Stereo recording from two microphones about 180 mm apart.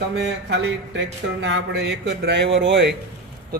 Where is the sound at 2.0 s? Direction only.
75° right (ahead or behind).